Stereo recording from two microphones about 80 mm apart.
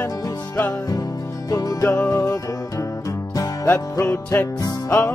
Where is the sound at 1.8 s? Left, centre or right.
Left.